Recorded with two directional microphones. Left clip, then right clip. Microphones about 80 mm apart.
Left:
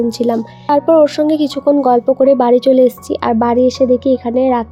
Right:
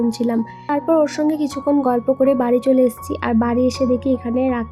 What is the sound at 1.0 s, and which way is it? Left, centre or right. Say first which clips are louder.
Speech: left 6 dB; left.